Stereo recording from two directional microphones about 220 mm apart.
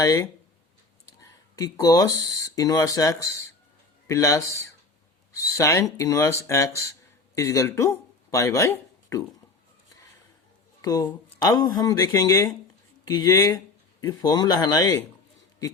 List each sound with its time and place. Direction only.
0.0 s speech: 15° left (ahead or behind)
10.8 s speech: 15° left (ahead or behind)